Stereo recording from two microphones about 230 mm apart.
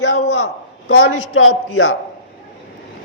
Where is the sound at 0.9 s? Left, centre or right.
Left.